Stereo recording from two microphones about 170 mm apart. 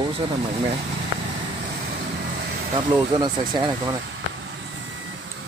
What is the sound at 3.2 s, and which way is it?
Speech, 20° right (ahead or behind).